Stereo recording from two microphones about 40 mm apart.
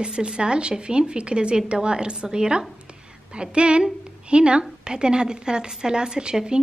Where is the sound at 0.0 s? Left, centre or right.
Right.